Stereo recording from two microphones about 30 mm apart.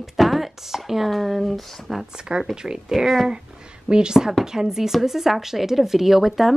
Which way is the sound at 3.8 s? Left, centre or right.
Right.